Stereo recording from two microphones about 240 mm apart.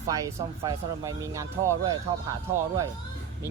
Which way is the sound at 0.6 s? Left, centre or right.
Centre.